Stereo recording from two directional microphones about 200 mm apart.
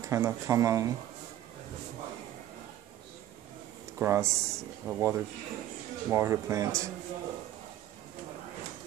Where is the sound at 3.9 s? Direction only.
15° right (ahead or behind).